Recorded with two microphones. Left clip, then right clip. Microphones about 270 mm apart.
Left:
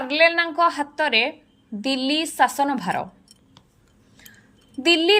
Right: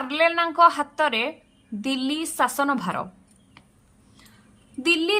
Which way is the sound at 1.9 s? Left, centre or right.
Right.